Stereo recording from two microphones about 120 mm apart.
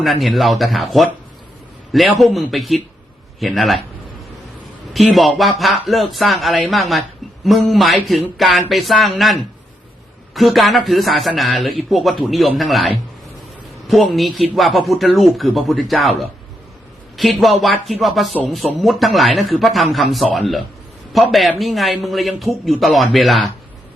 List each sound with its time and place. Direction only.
0.0 s speech: centre (ahead or behind)
2.2 s speech: centre (ahead or behind)
4.9 s a man's voice: centre (ahead or behind)